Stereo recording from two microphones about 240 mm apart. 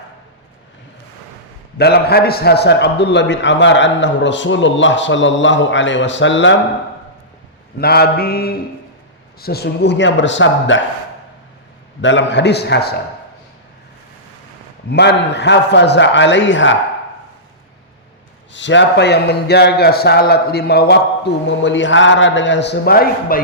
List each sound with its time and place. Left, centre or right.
1.8 s a man's voice: left
7.8 s mantra: left
9.4 s a man's voice: left
12.0 s a man's voice: left
14.8 s a man's voice: left
18.5 s a man's voice: left